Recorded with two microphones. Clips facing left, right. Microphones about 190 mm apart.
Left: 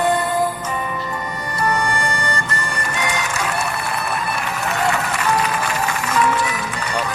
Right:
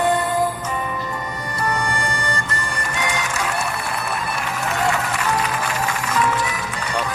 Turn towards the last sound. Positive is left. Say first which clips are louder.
# left 1 dB
turn(degrees=70)  # may be behind; listen again after turning